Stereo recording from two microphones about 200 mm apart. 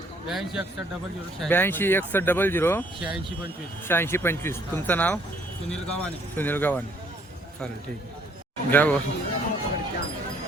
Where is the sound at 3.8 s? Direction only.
10° left (ahead or behind).